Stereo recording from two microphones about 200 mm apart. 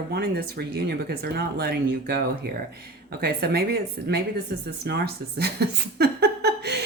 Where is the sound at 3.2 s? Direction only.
50° right (ahead or behind).